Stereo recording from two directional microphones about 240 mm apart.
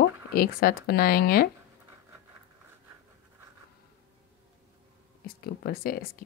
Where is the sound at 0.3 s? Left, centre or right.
Left.